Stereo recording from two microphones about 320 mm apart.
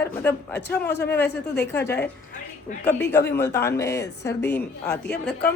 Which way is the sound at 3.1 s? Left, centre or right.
Centre.